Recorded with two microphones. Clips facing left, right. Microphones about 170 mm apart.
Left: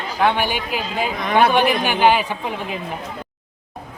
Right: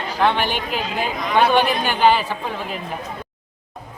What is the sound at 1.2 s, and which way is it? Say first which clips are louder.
Speech: left 1 dB; 55° left (ahead or behind).